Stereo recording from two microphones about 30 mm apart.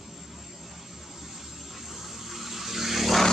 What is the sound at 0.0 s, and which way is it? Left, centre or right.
Vehicle, centre.